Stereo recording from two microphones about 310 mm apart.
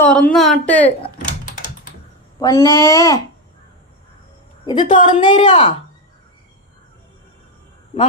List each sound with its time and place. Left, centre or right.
0.0 s speech: centre
2.4 s a woman's voice: centre
4.6 s a woman's voice: centre